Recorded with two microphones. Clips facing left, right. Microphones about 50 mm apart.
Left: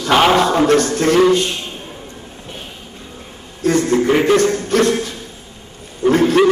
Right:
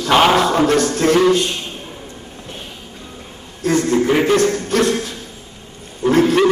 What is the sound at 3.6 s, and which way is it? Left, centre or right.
A man's voice, centre.